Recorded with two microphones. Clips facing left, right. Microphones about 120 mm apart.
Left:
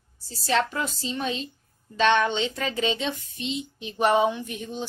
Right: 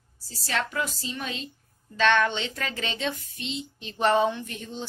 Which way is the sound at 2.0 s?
20° left (ahead or behind).